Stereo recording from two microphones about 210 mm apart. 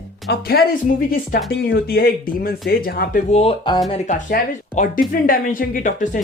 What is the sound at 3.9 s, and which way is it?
Speech, 35° left (ahead or behind).